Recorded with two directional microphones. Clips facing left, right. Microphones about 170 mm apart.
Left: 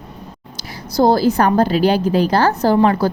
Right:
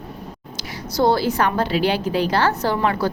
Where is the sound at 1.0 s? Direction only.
40° left (ahead or behind).